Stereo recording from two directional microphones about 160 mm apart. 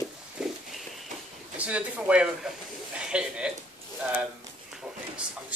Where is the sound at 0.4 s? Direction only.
5° right (ahead or behind).